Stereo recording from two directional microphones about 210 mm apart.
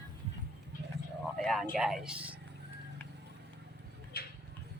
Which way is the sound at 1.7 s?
Centre (ahead or behind).